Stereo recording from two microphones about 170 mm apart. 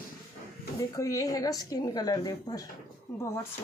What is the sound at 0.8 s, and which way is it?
Speech, 20° left (ahead or behind).